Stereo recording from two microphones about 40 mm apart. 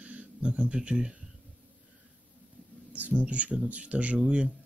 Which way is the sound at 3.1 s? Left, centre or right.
Right.